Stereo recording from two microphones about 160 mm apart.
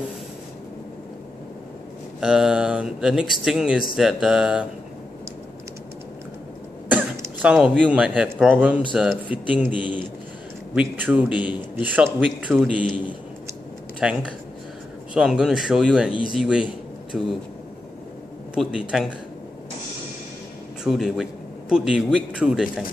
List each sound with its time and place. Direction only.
2.1 s speech: 5° right (ahead or behind)
6.9 s speech: 10° right (ahead or behind)
9.8 s a man's voice: 30° left (ahead or behind)
10.7 s a man's voice: 10° right (ahead or behind)
14.0 s speech: 5° right (ahead or behind)
18.5 s speech: 5° right (ahead or behind)
20.8 s speech: centre (ahead or behind)